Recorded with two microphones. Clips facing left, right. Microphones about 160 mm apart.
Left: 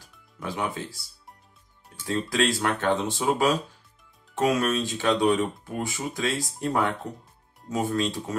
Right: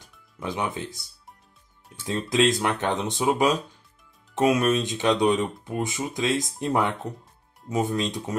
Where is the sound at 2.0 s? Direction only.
20° right (ahead or behind).